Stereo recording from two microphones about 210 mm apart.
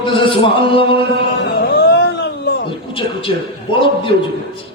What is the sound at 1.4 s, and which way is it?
Music, 55° left (ahead or behind).